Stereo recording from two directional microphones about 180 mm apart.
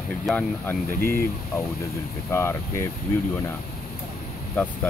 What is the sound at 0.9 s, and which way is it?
Speech, 55° left (ahead or behind).